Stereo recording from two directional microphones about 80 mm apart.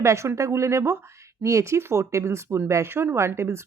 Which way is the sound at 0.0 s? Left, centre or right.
Right.